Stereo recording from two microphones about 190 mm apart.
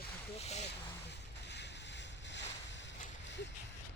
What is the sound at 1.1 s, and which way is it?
Boat, 65° left (ahead or behind).